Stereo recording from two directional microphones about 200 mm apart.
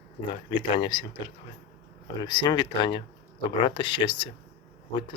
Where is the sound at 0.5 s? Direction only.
25° left (ahead or behind).